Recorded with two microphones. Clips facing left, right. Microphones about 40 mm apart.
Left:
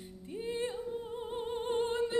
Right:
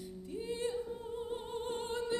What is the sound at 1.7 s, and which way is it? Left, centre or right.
Music, left.